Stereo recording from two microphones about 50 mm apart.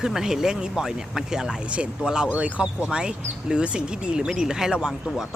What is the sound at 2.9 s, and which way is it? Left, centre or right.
Speech, centre.